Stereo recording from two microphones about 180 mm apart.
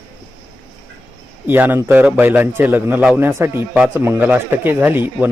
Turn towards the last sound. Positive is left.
turn(degrees=-10)  # may be behind; listen again after turning